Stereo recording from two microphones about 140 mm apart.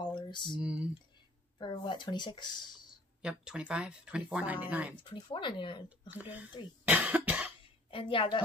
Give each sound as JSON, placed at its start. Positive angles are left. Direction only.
{"t": 0.0, "sound": "a sound", "side_deg": 35}
{"t": 0.6, "sound": "speech", "side_deg": -10}
{"t": 1.6, "sound": "speech", "side_deg": 35}
{"t": 3.2, "sound": "speech", "side_deg": -5}
{"t": 4.9, "sound": "speech", "side_deg": 35}
{"t": 5.9, "sound": "speech", "side_deg": -10}
{"t": 6.9, "sound": "cough", "side_deg": -10}
{"t": 7.9, "sound": "speech", "side_deg": 40}